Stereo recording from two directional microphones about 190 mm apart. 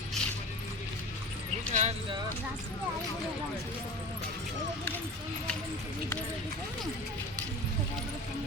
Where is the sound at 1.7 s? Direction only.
35° right (ahead or behind).